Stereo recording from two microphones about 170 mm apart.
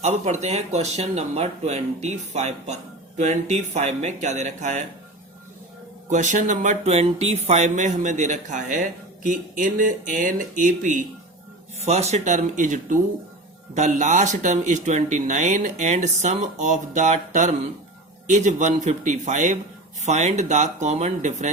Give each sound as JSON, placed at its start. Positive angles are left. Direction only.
{"t": 0.0, "sound": "speech", "side_deg": -40}
{"t": 6.1, "sound": "speech", "side_deg": -45}
{"t": 11.9, "sound": "speech", "side_deg": -40}